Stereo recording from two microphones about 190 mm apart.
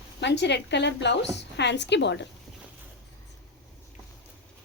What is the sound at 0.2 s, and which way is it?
A woman's voice, 65° left (ahead or behind).